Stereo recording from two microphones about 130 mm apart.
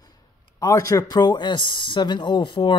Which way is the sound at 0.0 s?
30° left (ahead or behind).